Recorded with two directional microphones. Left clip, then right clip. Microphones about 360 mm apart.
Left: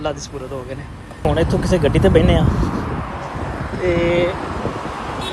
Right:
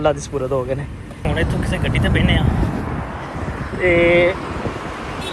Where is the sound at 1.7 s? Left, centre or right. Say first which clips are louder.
Left 7 dB; left.